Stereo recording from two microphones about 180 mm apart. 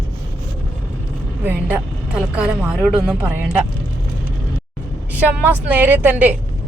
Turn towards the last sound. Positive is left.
turn(degrees=-10)  # may be behind; listen again after turning